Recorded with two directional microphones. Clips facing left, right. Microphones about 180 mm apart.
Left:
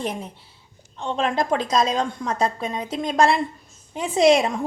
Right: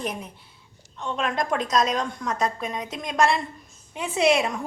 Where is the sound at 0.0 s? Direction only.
30° left (ahead or behind).